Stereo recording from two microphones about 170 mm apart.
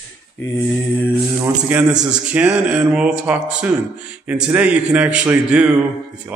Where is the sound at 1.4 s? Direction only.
10° right (ahead or behind).